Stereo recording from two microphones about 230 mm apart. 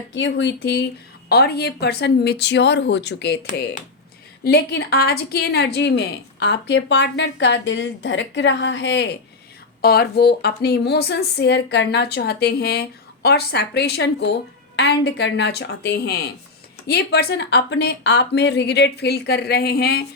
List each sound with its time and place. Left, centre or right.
0.1 s a woman's voice: left
4.4 s a woman's voice: left